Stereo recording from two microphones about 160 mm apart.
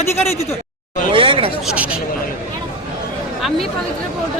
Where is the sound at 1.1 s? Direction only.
30° right (ahead or behind).